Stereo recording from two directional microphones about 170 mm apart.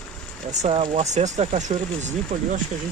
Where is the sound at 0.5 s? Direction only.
40° right (ahead or behind).